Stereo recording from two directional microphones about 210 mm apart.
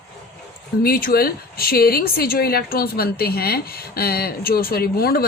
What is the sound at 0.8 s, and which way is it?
A woman's voice, 45° left (ahead or behind).